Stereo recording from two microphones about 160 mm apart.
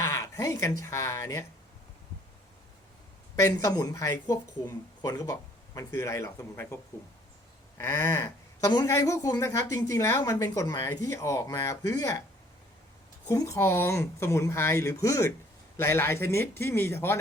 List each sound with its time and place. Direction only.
0.0 s speech: 20° left (ahead or behind)
3.3 s a woman's voice: 20° left (ahead or behind)
7.8 s a woman's voice: 15° left (ahead or behind)
13.2 s speech: 20° left (ahead or behind)